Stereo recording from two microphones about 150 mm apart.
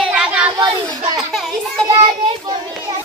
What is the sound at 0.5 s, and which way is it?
Speech, 30° right (ahead or behind).